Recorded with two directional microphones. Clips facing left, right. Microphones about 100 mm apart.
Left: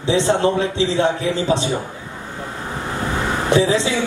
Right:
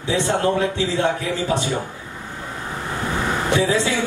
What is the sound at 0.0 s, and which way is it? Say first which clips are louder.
Speech: left 3 dB; 20° left (ahead or behind).